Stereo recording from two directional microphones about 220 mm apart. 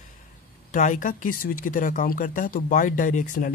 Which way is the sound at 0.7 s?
35° left (ahead or behind).